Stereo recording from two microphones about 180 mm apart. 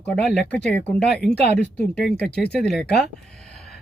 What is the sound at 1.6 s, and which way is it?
Speech, 70° left (ahead or behind).